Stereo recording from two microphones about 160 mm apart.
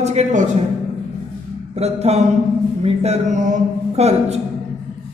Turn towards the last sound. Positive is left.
turn(degrees=-45)  # may be behind; listen again after turning